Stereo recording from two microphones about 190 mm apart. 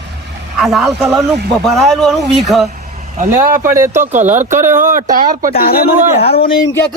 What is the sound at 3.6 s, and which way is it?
Speech, 15° right (ahead or behind).